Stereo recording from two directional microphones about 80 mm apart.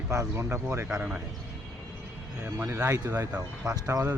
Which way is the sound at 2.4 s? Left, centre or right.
Right.